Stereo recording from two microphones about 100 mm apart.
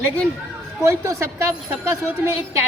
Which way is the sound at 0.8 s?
35° right (ahead or behind).